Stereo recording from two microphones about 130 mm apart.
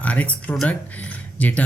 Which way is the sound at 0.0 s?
10° left (ahead or behind).